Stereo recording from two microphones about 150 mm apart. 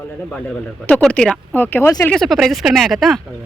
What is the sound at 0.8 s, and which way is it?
Speech, 10° left (ahead or behind).